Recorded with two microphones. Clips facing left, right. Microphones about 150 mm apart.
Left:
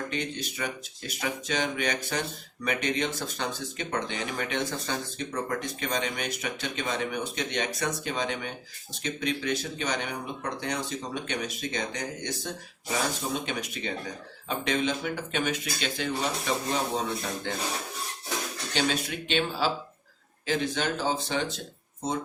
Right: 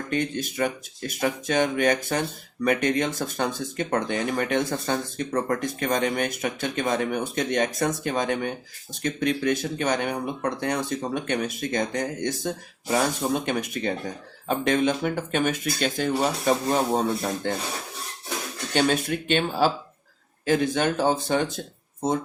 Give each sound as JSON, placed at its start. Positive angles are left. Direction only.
{"t": 0.1, "sound": "speech", "side_deg": -50}
{"t": 18.7, "sound": "speech", "side_deg": -50}